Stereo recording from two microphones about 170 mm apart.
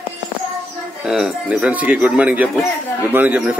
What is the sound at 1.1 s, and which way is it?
A man's voice, 5° right (ahead or behind).